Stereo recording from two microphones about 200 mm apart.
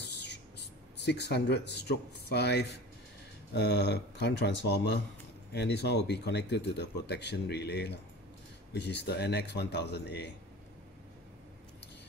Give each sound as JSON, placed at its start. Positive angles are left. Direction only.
{"t": 0.0, "sound": "speech", "side_deg": 60}